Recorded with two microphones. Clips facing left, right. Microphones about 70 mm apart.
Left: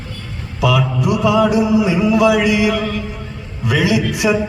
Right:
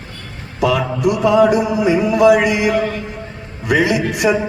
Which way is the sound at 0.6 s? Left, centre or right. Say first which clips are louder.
Right 1 dB; right.